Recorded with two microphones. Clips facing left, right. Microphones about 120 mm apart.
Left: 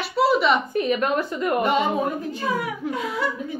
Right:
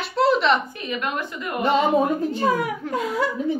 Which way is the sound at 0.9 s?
40° left (ahead or behind).